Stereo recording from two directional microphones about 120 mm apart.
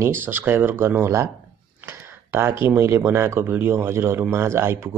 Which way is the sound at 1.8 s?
20° right (ahead or behind).